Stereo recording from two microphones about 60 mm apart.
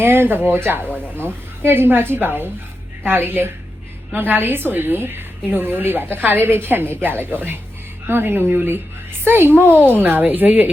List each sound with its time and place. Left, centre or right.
0.0 s a woman's voice: right